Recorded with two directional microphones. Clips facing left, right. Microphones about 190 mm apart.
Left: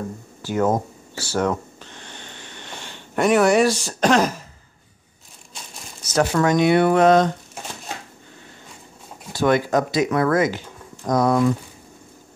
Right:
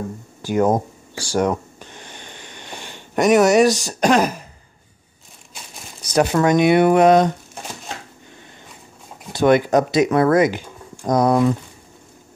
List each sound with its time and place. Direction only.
0.4 s a sound: 15° right (ahead or behind)
3.8 s speech: 10° right (ahead or behind)
6.1 s speech: 20° right (ahead or behind)
9.3 s speech: 20° right (ahead or behind)